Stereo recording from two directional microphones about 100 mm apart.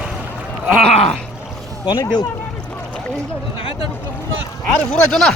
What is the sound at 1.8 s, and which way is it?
Speech, 40° left (ahead or behind).